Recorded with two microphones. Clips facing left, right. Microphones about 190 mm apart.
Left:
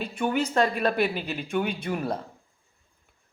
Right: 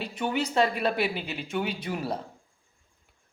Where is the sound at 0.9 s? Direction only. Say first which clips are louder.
Left 2 dB; 50° left (ahead or behind).